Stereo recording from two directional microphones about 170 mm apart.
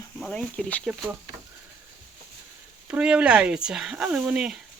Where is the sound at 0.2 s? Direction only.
5° left (ahead or behind).